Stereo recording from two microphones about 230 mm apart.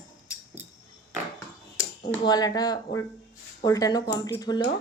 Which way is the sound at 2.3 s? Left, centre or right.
Centre.